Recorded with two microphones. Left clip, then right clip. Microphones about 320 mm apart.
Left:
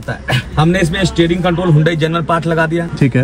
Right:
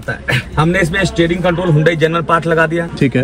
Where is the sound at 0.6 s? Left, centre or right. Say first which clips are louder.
Even; centre.